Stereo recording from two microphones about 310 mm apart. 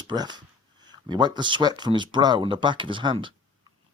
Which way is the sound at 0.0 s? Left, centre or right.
Centre.